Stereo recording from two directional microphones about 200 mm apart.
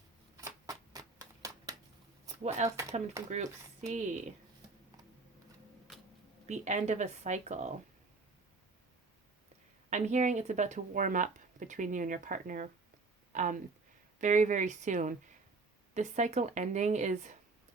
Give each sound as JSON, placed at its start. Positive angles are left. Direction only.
{"t": 0.3, "sound": "shuffling cards", "side_deg": -15}
{"t": 2.6, "sound": "speech", "side_deg": -15}
{"t": 3.2, "sound": "speech", "side_deg": -35}
{"t": 6.5, "sound": "speech", "side_deg": -35}
{"t": 9.9, "sound": "speech", "side_deg": -35}